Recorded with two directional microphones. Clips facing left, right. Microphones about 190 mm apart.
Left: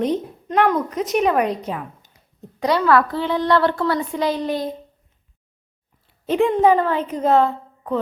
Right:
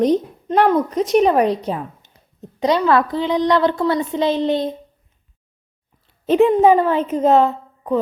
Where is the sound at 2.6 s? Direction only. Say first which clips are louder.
Right 1 dB; 20° right (ahead or behind).